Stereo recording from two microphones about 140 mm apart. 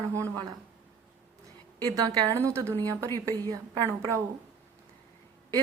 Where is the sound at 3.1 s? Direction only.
15° left (ahead or behind).